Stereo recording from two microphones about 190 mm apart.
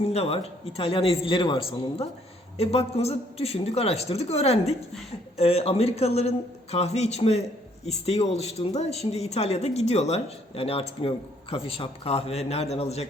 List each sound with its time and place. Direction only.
0.1 s a man's voice: 30° left (ahead or behind)